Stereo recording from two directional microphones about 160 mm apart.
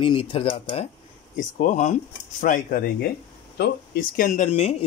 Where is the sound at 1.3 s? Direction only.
50° left (ahead or behind).